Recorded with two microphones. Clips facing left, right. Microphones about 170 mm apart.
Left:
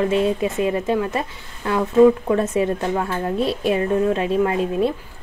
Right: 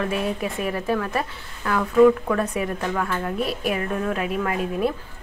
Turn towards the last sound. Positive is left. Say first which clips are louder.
# left 3 dB
turn(degrees=25)  # may be behind; listen again after turning